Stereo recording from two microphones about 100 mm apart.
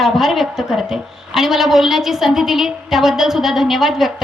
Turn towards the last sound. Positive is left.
turn(degrees=-5)  # may be behind; listen again after turning